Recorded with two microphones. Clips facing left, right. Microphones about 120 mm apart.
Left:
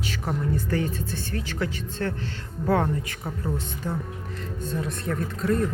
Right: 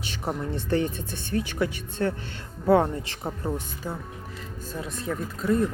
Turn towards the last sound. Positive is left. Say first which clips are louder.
# even
turn(degrees=-5)  # may be behind; listen again after turning